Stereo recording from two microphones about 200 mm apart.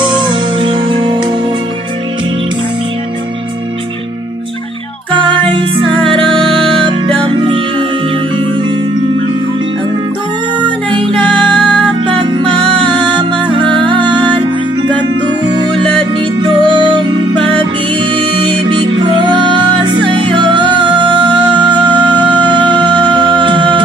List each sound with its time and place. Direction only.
0.0 s music: 25° right (ahead or behind)
5.1 s music: 25° right (ahead or behind)
7.2 s music: 25° right (ahead or behind)
10.6 s music: 25° right (ahead or behind)
15.5 s music: 25° right (ahead or behind)